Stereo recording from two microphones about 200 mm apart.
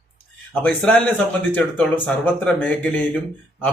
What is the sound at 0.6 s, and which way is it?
Speech, 5° left (ahead or behind).